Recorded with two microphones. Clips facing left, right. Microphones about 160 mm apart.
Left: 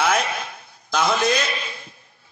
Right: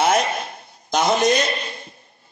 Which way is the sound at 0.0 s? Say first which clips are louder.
Right 3 dB; 40° right (ahead or behind).